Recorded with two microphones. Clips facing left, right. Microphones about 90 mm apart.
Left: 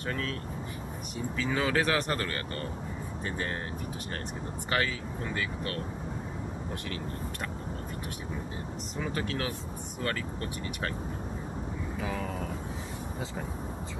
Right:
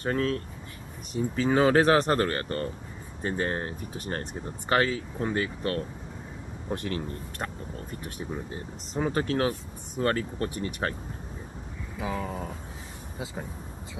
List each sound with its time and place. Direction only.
0.0 s speech: 35° right (ahead or behind)
4.6 s speech: 35° right (ahead or behind)
8.9 s speech: 35° right (ahead or behind)
12.0 s speech: 15° right (ahead or behind)